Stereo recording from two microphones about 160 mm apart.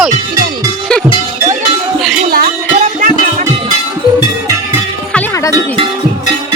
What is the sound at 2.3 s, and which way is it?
Music, 70° right (ahead or behind).